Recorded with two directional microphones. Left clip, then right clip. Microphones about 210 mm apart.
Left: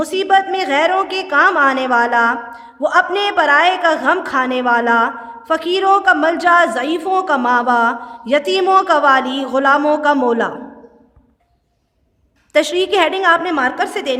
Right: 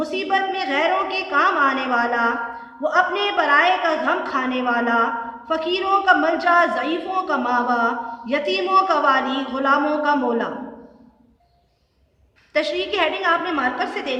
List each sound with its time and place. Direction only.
0.0 s a woman's voice: 50° left (ahead or behind)
12.5 s a woman's voice: 50° left (ahead or behind)